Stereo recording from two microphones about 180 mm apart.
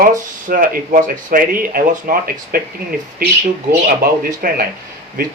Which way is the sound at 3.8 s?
45° right (ahead or behind).